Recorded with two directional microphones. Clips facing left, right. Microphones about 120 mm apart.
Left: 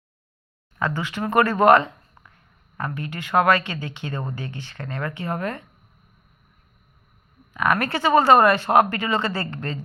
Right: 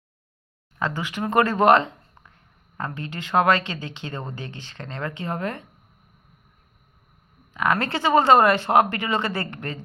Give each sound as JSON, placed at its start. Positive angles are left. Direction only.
{"t": 0.8, "sound": "speech", "side_deg": -15}
{"t": 7.5, "sound": "speech", "side_deg": -20}